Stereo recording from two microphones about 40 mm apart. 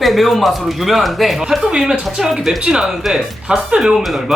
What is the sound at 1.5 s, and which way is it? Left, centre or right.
Speech, centre.